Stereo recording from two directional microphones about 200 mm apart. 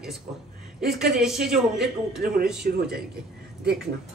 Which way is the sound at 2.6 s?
55° right (ahead or behind).